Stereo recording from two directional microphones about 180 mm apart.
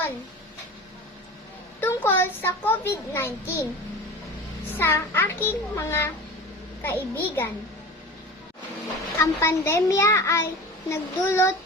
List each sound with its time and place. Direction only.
1.8 s a child's voice: 10° left (ahead or behind)
4.8 s a child's voice: 15° left (ahead or behind)
9.1 s a child's voice: 15° left (ahead or behind)